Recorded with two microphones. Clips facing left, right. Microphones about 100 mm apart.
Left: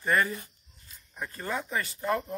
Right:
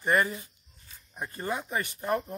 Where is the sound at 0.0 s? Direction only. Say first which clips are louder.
Right 1 dB; 15° right (ahead or behind).